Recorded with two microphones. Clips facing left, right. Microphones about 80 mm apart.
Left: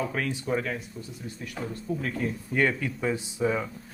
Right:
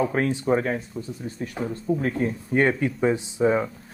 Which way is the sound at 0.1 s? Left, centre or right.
Right.